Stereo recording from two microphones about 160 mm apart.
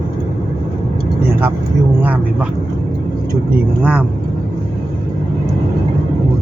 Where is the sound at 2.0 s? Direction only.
10° right (ahead or behind).